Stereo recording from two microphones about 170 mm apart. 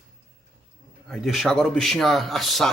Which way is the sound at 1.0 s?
Centre (ahead or behind).